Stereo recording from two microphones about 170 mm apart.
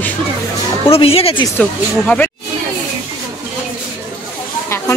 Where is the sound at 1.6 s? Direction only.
10° left (ahead or behind).